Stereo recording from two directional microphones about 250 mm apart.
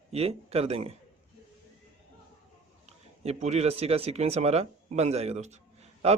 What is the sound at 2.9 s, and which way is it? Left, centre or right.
A man's voice, right.